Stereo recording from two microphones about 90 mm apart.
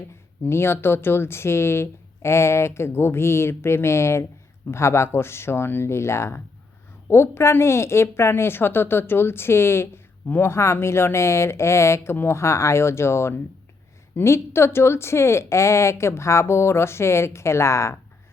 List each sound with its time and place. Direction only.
0.4 s a woman's voice: 25° left (ahead or behind)